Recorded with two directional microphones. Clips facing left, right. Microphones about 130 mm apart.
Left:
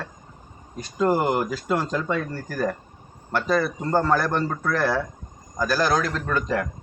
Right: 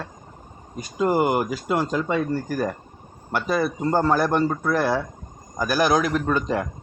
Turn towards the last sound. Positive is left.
turn(degrees=-20)  # may be behind; listen again after turning